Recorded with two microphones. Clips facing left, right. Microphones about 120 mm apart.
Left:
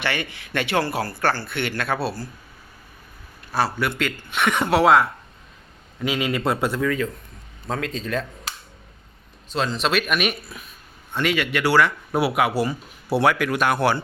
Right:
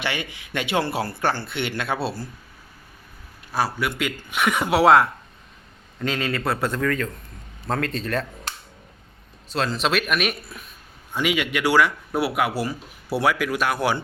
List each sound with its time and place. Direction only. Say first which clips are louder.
0.0 s speech: left 2 dB; 15° right (ahead or behind)
3.5 s speech: left 1 dB; 10° right (ahead or behind)
6.0 s speech: left 2 dB; 10° left (ahead or behind)
9.5 s speech: even; centre (ahead or behind)
11.1 s speech: left 1 dB; 10° right (ahead or behind)
12.1 s speech: left 4 dB; centre (ahead or behind)